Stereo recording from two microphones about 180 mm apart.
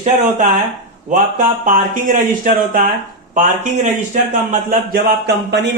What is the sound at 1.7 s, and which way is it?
Speech, 50° right (ahead or behind).